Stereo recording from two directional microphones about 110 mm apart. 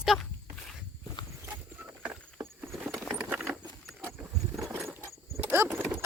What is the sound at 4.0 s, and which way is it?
Horse, 25° right (ahead or behind).